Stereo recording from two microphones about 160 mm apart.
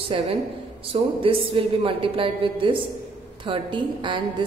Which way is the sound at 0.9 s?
40° right (ahead or behind).